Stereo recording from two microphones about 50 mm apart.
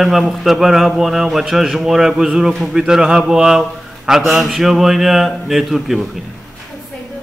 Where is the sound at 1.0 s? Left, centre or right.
Centre.